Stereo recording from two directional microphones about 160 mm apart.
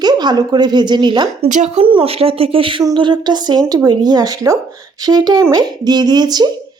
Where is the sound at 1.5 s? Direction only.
50° right (ahead or behind).